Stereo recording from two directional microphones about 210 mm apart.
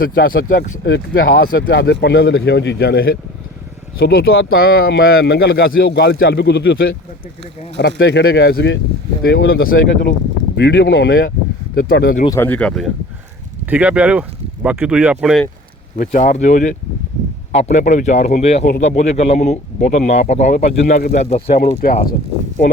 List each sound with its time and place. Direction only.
0.0 s speech: 45° left (ahead or behind)
10.6 s speech: 55° left (ahead or behind)
12.2 s speech: 10° left (ahead or behind)
16.0 s speech: 35° left (ahead or behind)
21.2 s speech: 30° left (ahead or behind)
21.8 s speech: 45° left (ahead or behind)